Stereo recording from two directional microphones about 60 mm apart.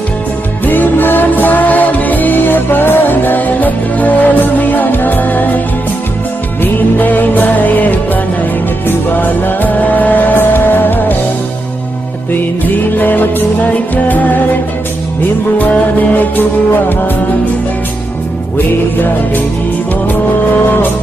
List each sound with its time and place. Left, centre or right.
0.6 s music: left
12.3 s music: left
15.5 s music: left
18.5 s music: left